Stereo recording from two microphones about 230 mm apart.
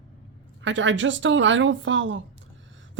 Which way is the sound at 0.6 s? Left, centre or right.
Right.